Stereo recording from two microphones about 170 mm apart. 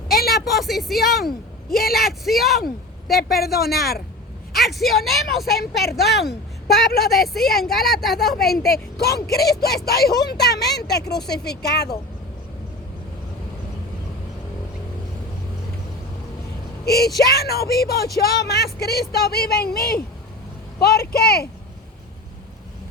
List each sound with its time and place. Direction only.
0.2 s vehicle: 65° left (ahead or behind)
0.4 s a woman's voice: centre (ahead or behind)
1.8 s speech: 60° left (ahead or behind)
2.0 s a woman's voice: centre (ahead or behind)
2.6 s a woman's voice: 65° left (ahead or behind)
4.6 s a woman's voice: centre (ahead or behind)
7.0 s a woman's voice: centre (ahead or behind)
9.0 s speech: 70° left (ahead or behind)
16.8 s speech: 70° left (ahead or behind)